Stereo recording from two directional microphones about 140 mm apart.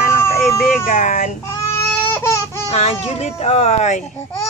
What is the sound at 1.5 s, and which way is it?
Baby cry, 20° left (ahead or behind).